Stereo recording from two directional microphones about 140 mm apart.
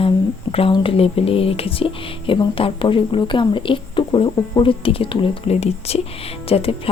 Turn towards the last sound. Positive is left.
turn(degrees=45)  # may be behind; listen again after turning